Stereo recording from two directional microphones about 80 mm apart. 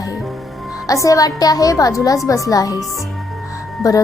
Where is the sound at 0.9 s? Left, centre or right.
Left.